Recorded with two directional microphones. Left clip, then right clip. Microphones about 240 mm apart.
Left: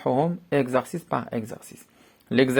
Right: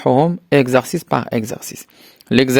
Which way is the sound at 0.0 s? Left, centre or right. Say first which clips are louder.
Right 9 dB; right.